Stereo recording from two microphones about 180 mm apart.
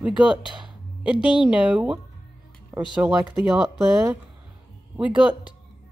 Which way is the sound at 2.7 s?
20° right (ahead or behind).